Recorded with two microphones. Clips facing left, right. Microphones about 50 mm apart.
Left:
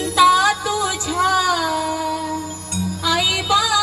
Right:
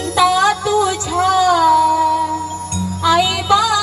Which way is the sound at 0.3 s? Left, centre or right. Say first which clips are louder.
Right 4 dB; centre.